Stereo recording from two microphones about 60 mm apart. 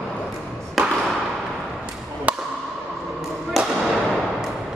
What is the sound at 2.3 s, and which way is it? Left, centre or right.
Chop, right.